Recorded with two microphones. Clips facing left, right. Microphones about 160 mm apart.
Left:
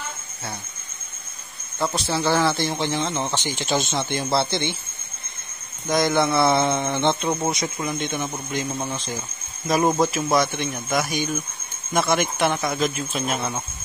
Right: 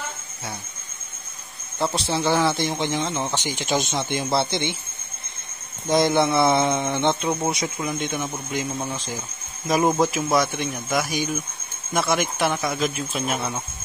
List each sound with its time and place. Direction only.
2.0 s speech: 20° right (ahead or behind)
5.9 s speech: 25° right (ahead or behind); by 13.4 s 5° right (ahead or behind)